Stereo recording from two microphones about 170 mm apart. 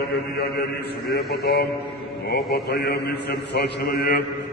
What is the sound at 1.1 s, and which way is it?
A man's voice, 65° left (ahead or behind).